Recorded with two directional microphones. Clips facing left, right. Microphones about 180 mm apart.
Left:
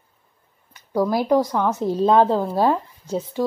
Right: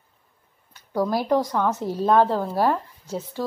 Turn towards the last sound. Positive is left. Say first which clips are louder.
# left 5 dB
turn(degrees=15)  # may be behind; listen again after turning